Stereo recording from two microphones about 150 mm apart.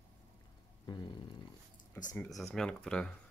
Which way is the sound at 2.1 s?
5° left (ahead or behind).